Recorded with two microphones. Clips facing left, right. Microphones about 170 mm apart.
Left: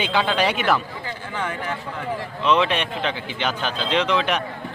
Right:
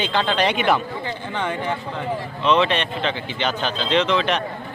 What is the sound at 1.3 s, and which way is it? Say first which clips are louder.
Speech: right 3 dB; 25° right (ahead or behind).